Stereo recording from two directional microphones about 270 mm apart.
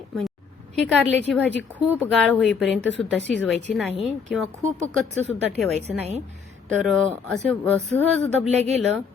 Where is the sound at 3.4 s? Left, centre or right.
Centre.